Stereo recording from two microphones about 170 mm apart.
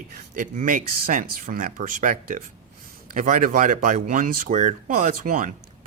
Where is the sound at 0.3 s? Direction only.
50° right (ahead or behind).